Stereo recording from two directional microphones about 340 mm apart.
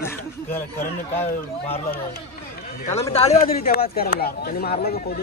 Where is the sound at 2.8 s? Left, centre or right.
Centre.